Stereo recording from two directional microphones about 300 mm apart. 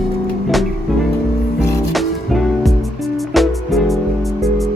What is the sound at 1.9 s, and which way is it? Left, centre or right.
Music, centre.